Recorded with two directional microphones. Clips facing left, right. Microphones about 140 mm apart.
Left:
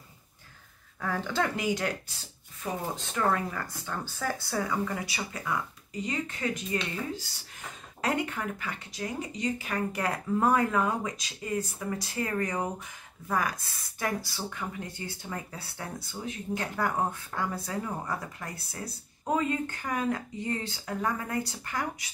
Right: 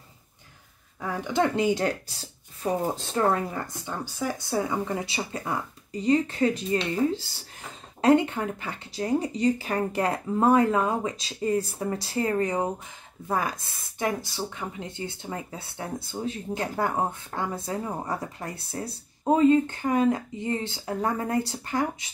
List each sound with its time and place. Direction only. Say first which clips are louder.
1.0 s speech: right 4 dB; 15° right (ahead or behind)